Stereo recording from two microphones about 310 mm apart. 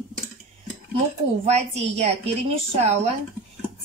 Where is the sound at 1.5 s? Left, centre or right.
Right.